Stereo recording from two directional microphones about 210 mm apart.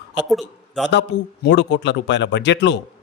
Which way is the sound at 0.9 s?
55° left (ahead or behind).